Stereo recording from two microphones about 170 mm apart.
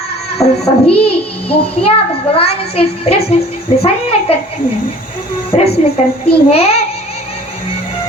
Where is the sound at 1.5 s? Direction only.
35° left (ahead or behind).